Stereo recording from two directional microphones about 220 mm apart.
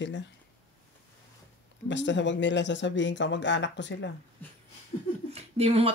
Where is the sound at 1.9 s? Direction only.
55° left (ahead or behind).